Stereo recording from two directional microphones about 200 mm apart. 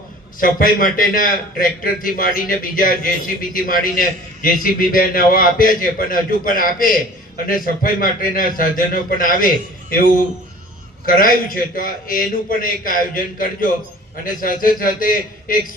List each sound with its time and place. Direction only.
0.3 s a man's voice: 45° left (ahead or behind)
11.0 s a man's voice: 45° left (ahead or behind)